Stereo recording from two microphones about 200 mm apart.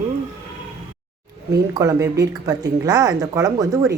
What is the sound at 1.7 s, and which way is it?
Speech, 15° right (ahead or behind).